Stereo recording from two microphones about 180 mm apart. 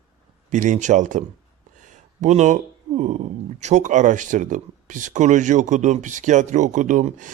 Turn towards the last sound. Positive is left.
turn(degrees=-45)  # may be behind; listen again after turning